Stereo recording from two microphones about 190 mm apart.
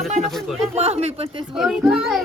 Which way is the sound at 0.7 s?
35° right (ahead or behind).